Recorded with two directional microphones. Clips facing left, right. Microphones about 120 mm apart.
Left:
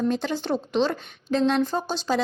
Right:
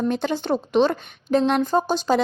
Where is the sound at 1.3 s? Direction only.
20° right (ahead or behind).